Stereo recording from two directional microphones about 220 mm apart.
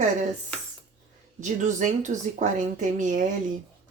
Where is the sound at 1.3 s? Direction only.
35° right (ahead or behind).